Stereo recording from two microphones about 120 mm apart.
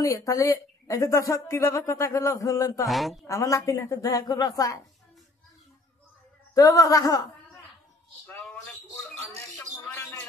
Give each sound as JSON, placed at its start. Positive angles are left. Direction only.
{"t": 0.0, "sound": "speech", "side_deg": 30}
{"t": 2.9, "sound": "speech", "side_deg": 0}
{"t": 3.3, "sound": "speech", "side_deg": 25}
{"t": 6.5, "sound": "speech", "side_deg": 30}
{"t": 9.6, "sound": "bird", "side_deg": 15}